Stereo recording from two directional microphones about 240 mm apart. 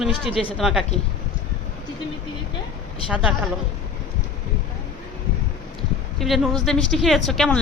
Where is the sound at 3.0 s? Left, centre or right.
Centre.